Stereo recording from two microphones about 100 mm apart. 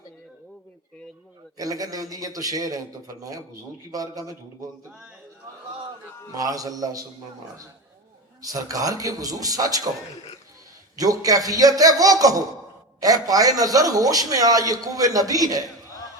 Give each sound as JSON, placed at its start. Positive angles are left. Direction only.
{"t": 1.5, "sound": "a man's voice", "side_deg": -35}
{"t": 3.9, "sound": "a man's voice", "side_deg": -35}
{"t": 6.3, "sound": "a man's voice", "side_deg": -35}
{"t": 8.4, "sound": "a man's voice", "side_deg": -35}
{"t": 10.9, "sound": "a man's voice", "side_deg": -35}